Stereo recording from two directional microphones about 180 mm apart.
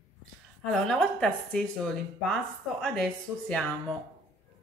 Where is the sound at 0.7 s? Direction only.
5° left (ahead or behind).